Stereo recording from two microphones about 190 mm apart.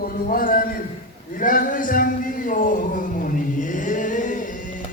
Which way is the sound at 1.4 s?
45° left (ahead or behind).